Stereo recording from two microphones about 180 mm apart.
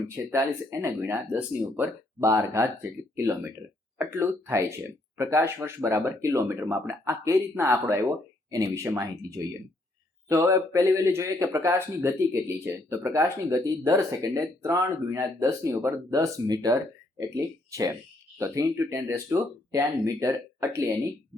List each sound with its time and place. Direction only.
0.2 s speech: 15° right (ahead or behind)